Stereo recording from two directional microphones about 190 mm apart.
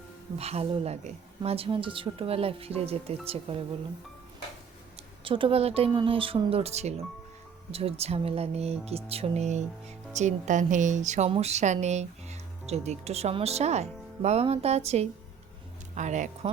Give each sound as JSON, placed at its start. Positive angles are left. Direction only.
{"t": 0.3, "sound": "speech", "side_deg": -35}
{"t": 5.2, "sound": "speech", "side_deg": -25}